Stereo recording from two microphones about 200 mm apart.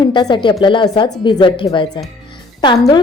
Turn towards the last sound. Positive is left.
turn(degrees=20)  # may be behind; listen again after turning